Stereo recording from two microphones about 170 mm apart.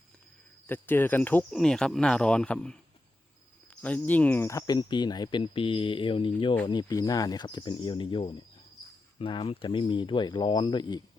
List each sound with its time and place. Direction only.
0.7 s speech: 10° left (ahead or behind)
3.8 s speech: 10° left (ahead or behind); by 11.0 s 25° left (ahead or behind)